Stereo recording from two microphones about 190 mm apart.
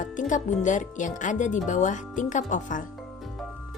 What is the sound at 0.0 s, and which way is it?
Speech, 40° left (ahead or behind).